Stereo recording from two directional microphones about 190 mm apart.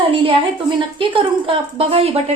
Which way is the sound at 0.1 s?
30° right (ahead or behind).